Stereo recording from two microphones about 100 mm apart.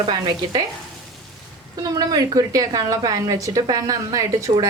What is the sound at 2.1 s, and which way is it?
Speech, 40° right (ahead or behind).